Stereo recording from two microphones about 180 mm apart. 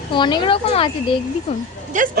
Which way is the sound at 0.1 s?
25° left (ahead or behind).